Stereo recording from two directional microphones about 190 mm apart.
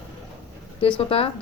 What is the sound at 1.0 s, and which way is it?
Speech, 30° left (ahead or behind).